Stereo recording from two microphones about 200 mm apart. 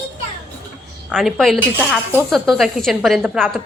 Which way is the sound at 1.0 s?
Centre (ahead or behind).